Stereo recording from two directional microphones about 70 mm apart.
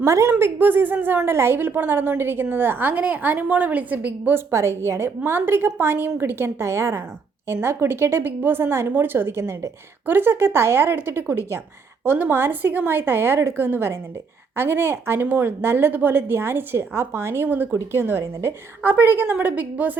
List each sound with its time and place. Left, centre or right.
0.0 s a woman's voice: right
4.5 s a woman's voice: right
10.1 s a woman's voice: right
12.0 s a woman's voice: right
18.8 s a woman's voice: right